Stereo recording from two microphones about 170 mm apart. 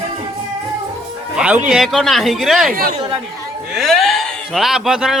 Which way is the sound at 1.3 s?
5° right (ahead or behind).